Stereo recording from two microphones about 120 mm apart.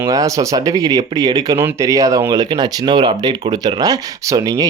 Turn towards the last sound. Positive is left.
turn(degrees=-30)  # may be behind; listen again after turning